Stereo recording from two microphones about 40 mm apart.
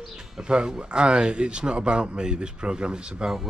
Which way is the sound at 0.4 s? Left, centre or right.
Right.